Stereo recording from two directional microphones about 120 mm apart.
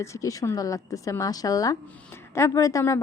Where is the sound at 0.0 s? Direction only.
25° left (ahead or behind).